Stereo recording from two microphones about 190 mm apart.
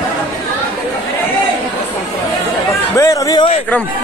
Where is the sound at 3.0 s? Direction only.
20° left (ahead or behind).